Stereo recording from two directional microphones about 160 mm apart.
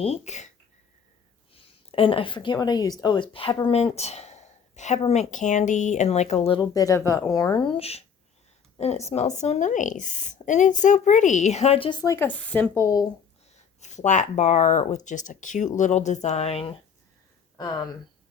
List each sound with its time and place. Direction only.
0.0 s speech: 40° left (ahead or behind)
1.9 s a woman's voice: 35° left (ahead or behind)
6.6 s speech: 20° left (ahead or behind)
12.0 s speech: 15° left (ahead or behind)
13.9 s speech: 50° left (ahead or behind)